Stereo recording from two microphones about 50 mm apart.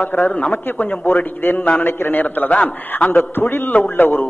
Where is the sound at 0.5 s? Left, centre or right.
Left.